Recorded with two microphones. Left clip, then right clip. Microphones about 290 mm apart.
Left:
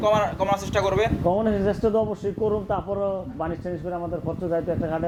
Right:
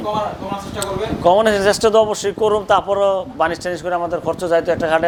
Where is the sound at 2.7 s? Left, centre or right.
Centre.